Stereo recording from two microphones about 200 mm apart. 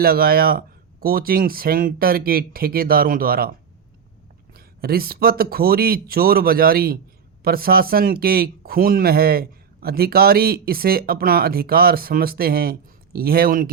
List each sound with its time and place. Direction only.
0.0 s speech: 50° right (ahead or behind)
4.5 s speech: 50° right (ahead or behind)